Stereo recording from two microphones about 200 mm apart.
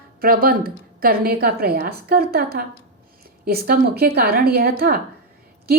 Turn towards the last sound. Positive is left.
turn(degrees=-50)  # may be behind; listen again after turning